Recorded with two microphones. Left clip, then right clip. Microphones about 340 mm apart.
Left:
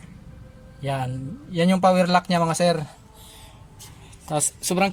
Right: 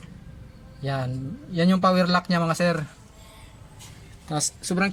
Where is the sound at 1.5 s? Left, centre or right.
Centre.